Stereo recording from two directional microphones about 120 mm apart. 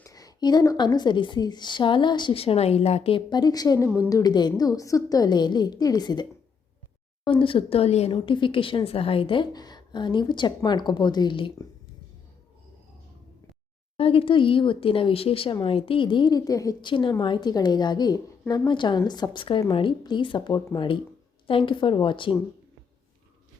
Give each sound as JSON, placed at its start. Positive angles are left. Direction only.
{"t": 0.0, "sound": "a woman's voice", "side_deg": 30}
{"t": 3.2, "sound": "a woman's voice", "side_deg": 35}
{"t": 7.3, "sound": "a woman's voice", "side_deg": 45}
{"t": 13.9, "sound": "a woman's voice", "side_deg": 50}
{"t": 16.8, "sound": "a woman's voice", "side_deg": 40}